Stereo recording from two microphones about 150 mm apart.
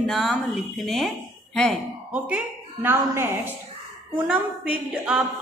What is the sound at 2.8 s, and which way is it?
A woman's voice, 15° right (ahead or behind).